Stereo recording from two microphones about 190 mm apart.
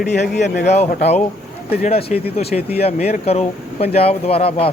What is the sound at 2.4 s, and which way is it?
Speech, 30° left (ahead or behind).